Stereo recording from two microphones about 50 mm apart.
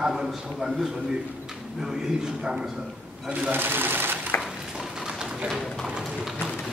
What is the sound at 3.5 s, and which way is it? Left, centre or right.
Speech, right.